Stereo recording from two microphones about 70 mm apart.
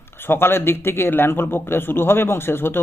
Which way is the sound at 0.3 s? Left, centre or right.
Left.